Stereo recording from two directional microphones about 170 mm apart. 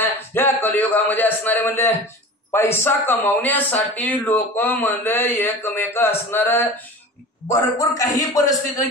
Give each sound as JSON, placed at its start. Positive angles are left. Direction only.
{"t": 0.0, "sound": "a man's voice", "side_deg": 10}